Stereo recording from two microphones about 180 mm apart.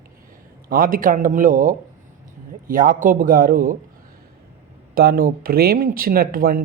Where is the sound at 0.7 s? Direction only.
50° right (ahead or behind).